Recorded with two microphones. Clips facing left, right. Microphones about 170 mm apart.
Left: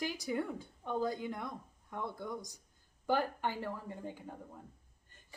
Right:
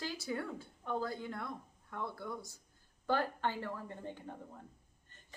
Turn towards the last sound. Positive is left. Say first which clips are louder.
# left 1 dB
turn(degrees=10)  # may be behind; listen again after turning